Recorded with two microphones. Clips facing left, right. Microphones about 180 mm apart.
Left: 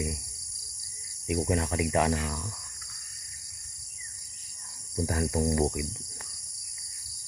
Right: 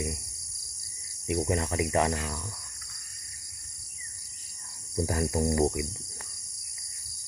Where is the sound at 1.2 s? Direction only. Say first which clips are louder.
Even; centre (ahead or behind).